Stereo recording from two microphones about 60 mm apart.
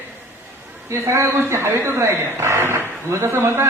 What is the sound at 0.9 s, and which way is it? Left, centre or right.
A man's voice, right.